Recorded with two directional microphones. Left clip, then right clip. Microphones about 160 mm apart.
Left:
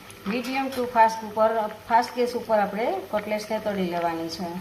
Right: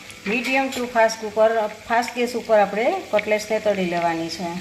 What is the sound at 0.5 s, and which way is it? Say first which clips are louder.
Speech: even; 50° right (ahead or behind).